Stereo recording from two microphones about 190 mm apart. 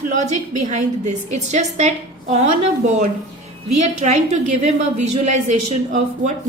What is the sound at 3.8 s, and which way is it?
Speech, 35° right (ahead or behind).